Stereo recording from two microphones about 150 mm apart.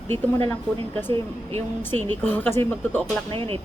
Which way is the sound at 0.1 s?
40° right (ahead or behind).